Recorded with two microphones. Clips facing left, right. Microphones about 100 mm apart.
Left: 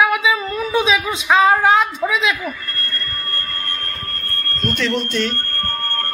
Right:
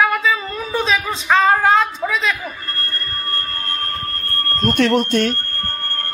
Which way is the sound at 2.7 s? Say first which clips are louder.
Even; 30° right (ahead or behind).